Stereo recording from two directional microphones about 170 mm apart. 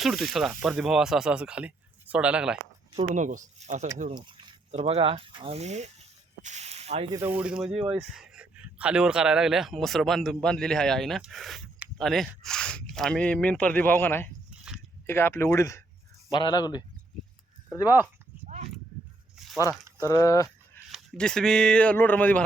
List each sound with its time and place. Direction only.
0.0 s speech: centre (ahead or behind)
3.2 s speech: 45° right (ahead or behind)
4.1 s a sound: 25° right (ahead or behind)
4.7 s speech: 40° right (ahead or behind)
7.1 s speech: 15° right (ahead or behind); by 14.3 s 10° left (ahead or behind)
14.5 s biting: 5° right (ahead or behind)
15.0 s speech: 15° left (ahead or behind)
18.4 s a sound: 40° right (ahead or behind)
19.4 s a sound: centre (ahead or behind)
20.1 s speech: 20° left (ahead or behind)
20.9 s speech: 5° left (ahead or behind)